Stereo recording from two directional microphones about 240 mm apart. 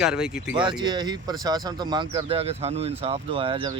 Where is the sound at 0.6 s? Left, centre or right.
Centre.